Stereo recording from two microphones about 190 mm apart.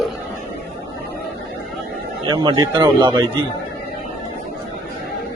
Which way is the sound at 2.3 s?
25° right (ahead or behind).